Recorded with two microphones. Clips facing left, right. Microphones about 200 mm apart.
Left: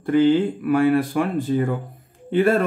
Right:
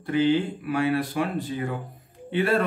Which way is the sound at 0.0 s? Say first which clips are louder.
Left 5 dB; 50° left (ahead or behind).